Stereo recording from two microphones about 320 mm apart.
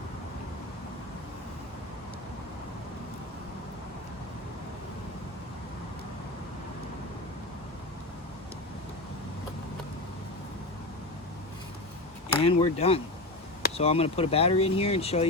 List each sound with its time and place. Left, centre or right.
12.4 s speech: centre